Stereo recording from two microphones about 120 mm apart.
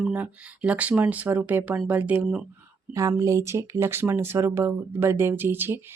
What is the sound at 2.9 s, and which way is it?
Speech, 30° right (ahead or behind).